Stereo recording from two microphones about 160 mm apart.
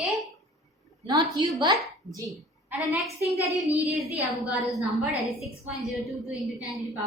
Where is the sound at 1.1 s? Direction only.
25° right (ahead or behind).